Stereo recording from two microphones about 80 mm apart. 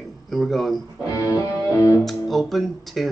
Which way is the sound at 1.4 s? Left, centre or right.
Left.